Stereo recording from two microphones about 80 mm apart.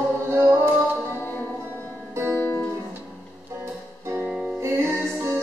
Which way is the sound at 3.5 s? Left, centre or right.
Right.